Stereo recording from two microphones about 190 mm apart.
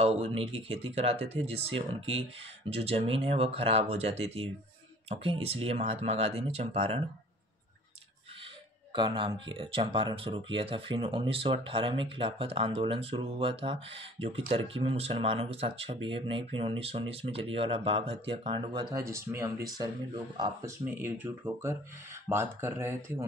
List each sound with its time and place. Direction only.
0.0 s speech: 30° right (ahead or behind)
8.9 s speech: 25° right (ahead or behind)
20.8 s speech: 10° right (ahead or behind)